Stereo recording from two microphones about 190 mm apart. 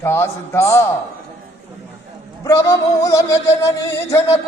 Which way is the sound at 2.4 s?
15° left (ahead or behind).